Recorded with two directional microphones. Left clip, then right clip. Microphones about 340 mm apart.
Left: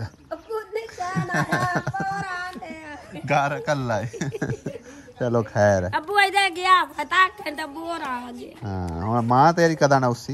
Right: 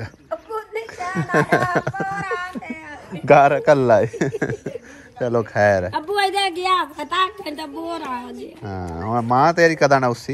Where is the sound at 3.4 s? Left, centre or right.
Centre.